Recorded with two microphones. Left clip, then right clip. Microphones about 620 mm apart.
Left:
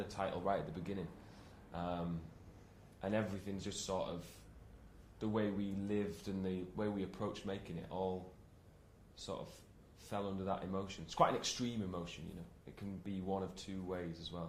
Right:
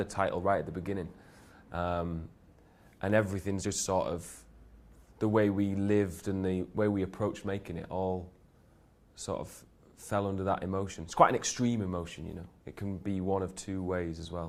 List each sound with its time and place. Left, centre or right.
0.1 s speech: right